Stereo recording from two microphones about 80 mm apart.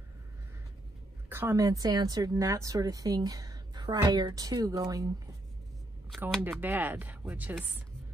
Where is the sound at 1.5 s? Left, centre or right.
Right.